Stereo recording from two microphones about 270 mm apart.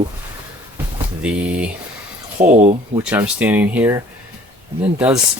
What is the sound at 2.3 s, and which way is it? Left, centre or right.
Speech, right.